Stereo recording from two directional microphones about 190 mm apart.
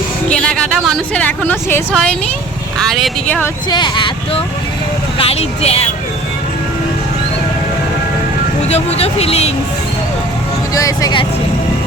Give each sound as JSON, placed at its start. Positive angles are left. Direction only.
{"t": 0.3, "sound": "a woman's voice", "side_deg": 5}
{"t": 3.7, "sound": "speech", "side_deg": 25}
{"t": 8.6, "sound": "speech", "side_deg": 35}
{"t": 10.8, "sound": "speech", "side_deg": 20}